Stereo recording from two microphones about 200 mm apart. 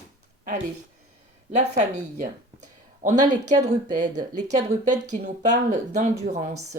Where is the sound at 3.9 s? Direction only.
20° right (ahead or behind).